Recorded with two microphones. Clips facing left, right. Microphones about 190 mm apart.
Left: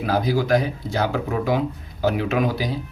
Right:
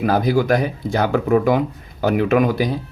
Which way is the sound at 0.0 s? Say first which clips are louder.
Right 4 dB; 55° right (ahead or behind).